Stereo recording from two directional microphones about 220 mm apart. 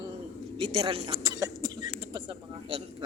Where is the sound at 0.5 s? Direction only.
25° right (ahead or behind).